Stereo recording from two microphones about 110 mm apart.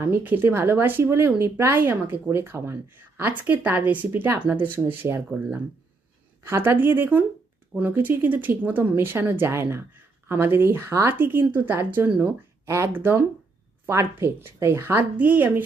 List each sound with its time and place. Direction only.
0.0 s speech: 20° right (ahead or behind)